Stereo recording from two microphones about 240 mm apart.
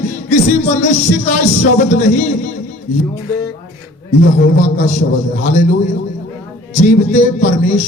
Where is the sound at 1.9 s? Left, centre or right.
Left.